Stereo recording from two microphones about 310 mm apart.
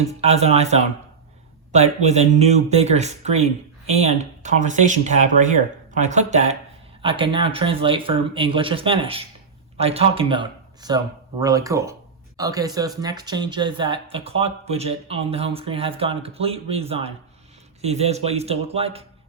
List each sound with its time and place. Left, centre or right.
0.2 s speech: centre